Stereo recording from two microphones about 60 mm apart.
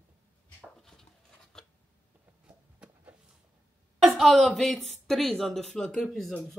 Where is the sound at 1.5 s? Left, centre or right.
Centre.